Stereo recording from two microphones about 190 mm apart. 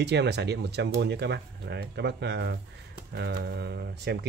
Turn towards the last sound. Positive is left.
turn(degrees=-60)  # may be behind; listen again after turning